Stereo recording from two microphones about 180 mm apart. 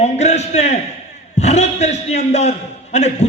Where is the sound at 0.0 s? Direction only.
40° left (ahead or behind).